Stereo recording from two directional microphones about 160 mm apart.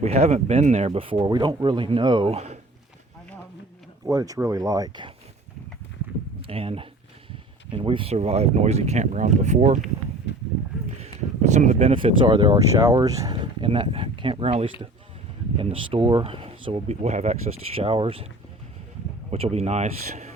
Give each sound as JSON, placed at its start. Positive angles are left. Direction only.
{"t": 0.0, "sound": "speech", "side_deg": -40}
{"t": 4.0, "sound": "speech", "side_deg": -20}
{"t": 6.5, "sound": "speech", "side_deg": -35}
{"t": 10.3, "sound": "a sound", "side_deg": 90}
{"t": 10.8, "sound": "speech", "side_deg": -45}
{"t": 12.7, "sound": "speech", "side_deg": -20}
{"t": 19.3, "sound": "speech", "side_deg": -40}